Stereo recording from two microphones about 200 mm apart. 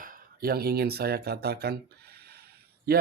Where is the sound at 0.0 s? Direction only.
45° right (ahead or behind).